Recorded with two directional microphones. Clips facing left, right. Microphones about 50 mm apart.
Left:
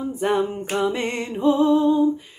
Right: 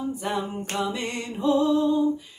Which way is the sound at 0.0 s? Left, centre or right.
Left.